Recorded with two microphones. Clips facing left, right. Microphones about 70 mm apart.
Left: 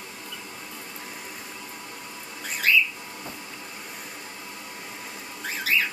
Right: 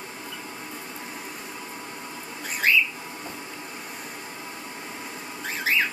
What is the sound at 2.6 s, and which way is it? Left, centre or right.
Bird, right.